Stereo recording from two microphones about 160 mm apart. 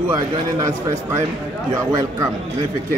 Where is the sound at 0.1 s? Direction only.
20° right (ahead or behind).